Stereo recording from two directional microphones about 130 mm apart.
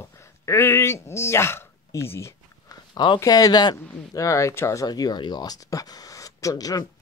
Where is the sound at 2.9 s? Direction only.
35° left (ahead or behind).